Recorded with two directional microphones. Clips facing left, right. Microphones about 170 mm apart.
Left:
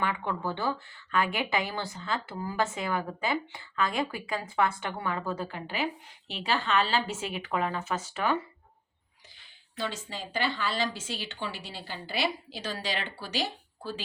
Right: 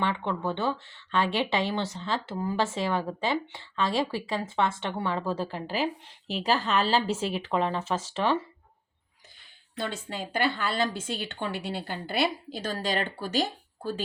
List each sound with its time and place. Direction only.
0.0 s speech: 25° right (ahead or behind)
9.7 s a woman's voice: 55° right (ahead or behind)